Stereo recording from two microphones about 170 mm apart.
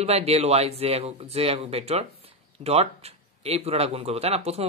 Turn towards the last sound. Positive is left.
turn(degrees=-35)  # may be behind; listen again after turning